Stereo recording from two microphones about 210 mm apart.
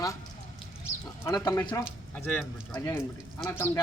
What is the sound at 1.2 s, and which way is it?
Speech, 10° left (ahead or behind).